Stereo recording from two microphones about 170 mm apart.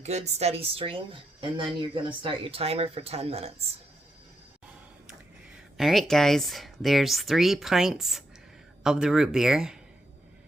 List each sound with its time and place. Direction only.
0.0 s speech: 40° right (ahead or behind)
5.7 s speech: centre (ahead or behind)